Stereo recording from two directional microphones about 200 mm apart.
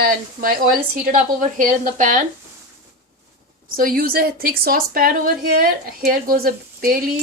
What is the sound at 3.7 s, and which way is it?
A woman's voice, 45° right (ahead or behind).